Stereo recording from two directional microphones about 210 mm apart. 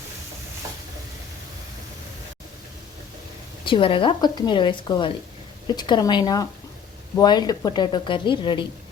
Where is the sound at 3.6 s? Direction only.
25° left (ahead or behind).